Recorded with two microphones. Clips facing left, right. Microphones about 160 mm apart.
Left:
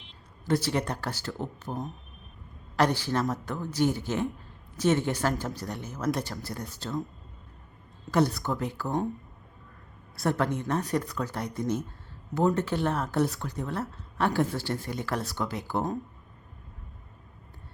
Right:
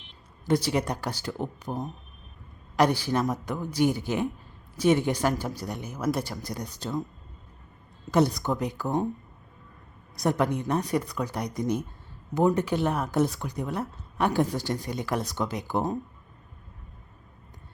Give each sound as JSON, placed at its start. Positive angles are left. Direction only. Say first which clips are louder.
{"t": 0.4, "sound": "speech", "louder": "right 2 dB", "side_deg": -15}
{"t": 2.7, "sound": "speech", "louder": "right 2 dB", "side_deg": -15}
{"t": 8.1, "sound": "speech", "louder": "right 2 dB", "side_deg": -15}
{"t": 10.2, "sound": "speech", "louder": "right 2 dB", "side_deg": -15}